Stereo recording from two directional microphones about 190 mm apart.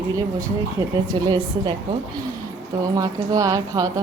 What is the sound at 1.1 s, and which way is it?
Speech, 25° right (ahead or behind).